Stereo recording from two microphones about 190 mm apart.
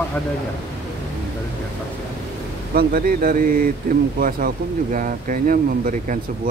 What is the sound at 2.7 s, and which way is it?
Speech, 50° right (ahead or behind).